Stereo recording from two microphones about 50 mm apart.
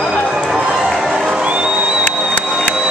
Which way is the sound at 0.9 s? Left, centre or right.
Centre.